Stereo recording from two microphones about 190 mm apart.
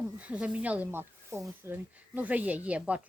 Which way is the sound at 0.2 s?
5° right (ahead or behind).